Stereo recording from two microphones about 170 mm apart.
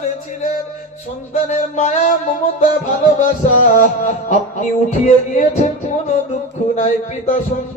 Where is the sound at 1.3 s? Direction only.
45° left (ahead or behind).